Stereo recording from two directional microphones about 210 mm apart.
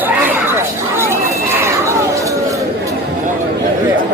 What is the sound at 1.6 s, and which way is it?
Chatter, 15° right (ahead or behind).